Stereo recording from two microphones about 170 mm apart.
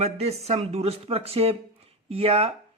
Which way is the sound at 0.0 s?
40° right (ahead or behind).